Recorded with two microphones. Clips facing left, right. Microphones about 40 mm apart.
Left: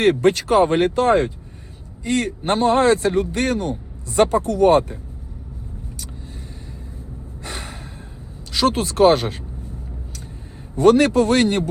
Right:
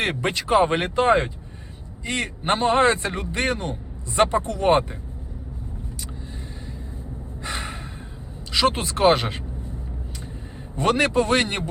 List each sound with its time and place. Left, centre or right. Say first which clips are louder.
0.0 s speech: left 8 dB; right
7.4 s gasp: right 2 dB; right
8.5 s speech: left 4 dB; right
10.8 s speech: left 6 dB; right